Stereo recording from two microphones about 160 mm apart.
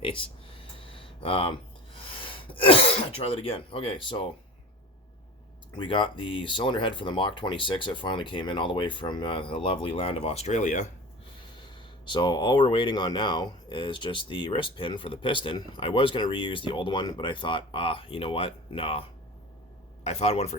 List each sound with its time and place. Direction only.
0.0 s speech: 30° left (ahead or behind)
5.7 s speech: 30° left (ahead or behind); by 10.8 s 50° left (ahead or behind)
11.7 s speech: 30° left (ahead or behind)
20.1 s speech: 40° left (ahead or behind)